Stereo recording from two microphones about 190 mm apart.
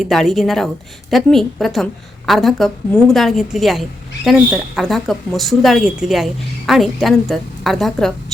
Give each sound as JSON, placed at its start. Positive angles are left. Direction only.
{"t": 0.0, "sound": "a woman's voice", "side_deg": 0}